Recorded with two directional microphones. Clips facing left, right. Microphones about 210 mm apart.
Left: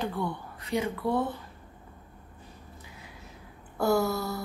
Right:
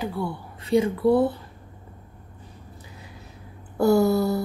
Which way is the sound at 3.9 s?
30° right (ahead or behind).